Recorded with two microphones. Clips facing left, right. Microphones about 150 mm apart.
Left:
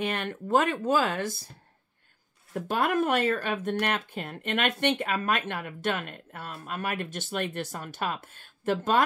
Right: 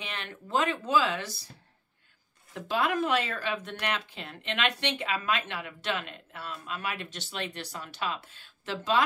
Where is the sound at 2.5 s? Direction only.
50° left (ahead or behind).